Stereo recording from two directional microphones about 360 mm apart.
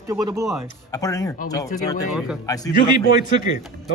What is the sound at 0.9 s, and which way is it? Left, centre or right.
Speech, centre.